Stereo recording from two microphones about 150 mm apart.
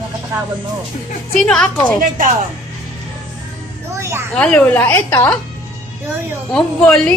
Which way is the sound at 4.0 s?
20° right (ahead or behind).